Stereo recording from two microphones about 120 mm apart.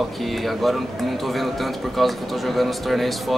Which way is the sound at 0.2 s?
Centre (ahead or behind).